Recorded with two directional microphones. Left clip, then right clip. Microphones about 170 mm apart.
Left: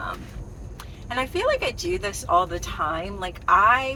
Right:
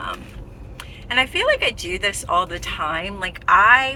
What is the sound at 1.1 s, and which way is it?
Speech, 25° right (ahead or behind).